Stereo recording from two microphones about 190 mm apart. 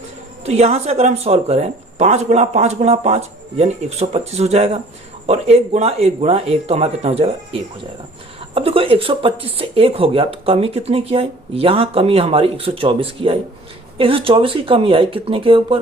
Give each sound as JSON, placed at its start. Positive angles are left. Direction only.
{"t": 0.4, "sound": "speech", "side_deg": -35}